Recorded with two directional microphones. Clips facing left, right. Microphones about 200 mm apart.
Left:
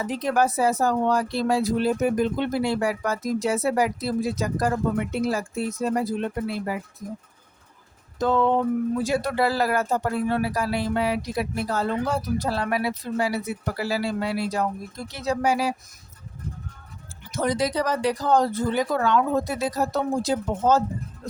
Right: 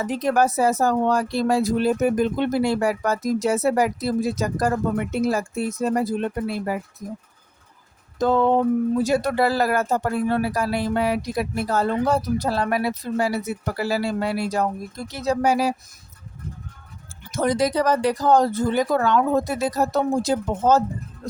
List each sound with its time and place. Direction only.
0.1 s speech: 45° right (ahead or behind)
8.2 s a sound: 40° right (ahead or behind)
9.0 s speech: 45° right (ahead or behind)
17.3 s speech: 50° right (ahead or behind)